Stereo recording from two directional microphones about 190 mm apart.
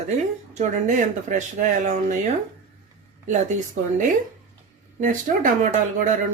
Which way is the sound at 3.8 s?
40° right (ahead or behind).